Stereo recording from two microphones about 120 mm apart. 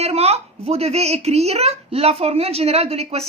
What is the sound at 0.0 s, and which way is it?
A woman's voice, 60° right (ahead or behind).